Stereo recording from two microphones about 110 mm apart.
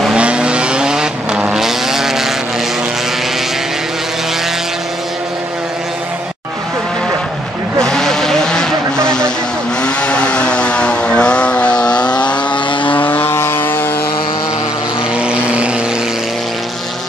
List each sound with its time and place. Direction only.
0.0 s vehicle: 10° right (ahead or behind)
7.8 s vehicle: 5° left (ahead or behind)
12.5 s vehicle: 50° left (ahead or behind)
13.0 s vehicle: 20° left (ahead or behind)
15.1 s vehicle: 10° right (ahead or behind)